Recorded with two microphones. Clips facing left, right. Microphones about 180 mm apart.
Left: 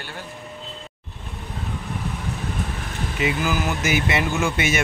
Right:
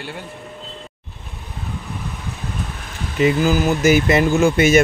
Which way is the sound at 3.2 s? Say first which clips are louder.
Right 8 dB; 35° right (ahead or behind).